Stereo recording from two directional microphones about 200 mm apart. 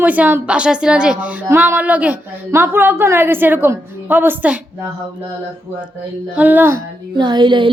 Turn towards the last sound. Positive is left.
turn(degrees=-25)  # may be behind; listen again after turning